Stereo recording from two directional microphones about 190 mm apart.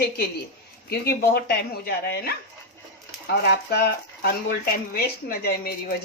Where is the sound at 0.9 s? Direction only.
55° left (ahead or behind).